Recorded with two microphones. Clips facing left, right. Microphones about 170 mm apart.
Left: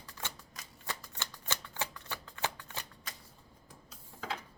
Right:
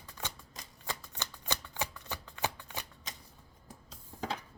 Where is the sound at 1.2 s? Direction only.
15° right (ahead or behind).